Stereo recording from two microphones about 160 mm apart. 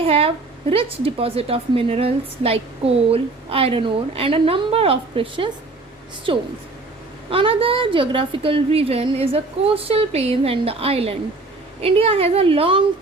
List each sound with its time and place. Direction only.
0.0 s a woman's voice: 35° right (ahead or behind)